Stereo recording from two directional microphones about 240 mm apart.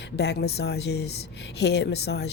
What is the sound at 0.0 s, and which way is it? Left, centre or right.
Speech, left.